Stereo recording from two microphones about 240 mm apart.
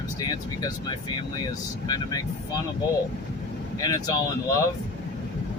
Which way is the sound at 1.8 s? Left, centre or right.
Centre.